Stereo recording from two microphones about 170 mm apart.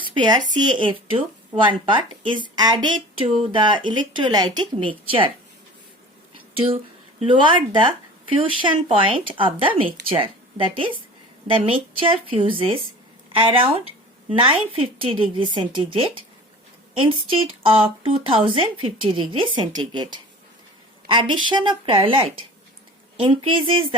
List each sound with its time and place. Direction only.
0.0 s a woman's voice: 25° right (ahead or behind)
6.3 s a sound: 30° right (ahead or behind)
7.2 s a woman's voice: 30° right (ahead or behind)